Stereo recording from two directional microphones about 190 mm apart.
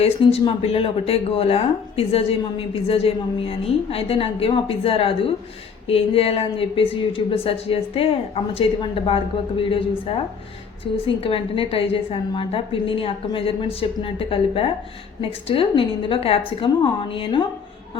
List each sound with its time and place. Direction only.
0.0 s a woman's voice: 30° left (ahead or behind)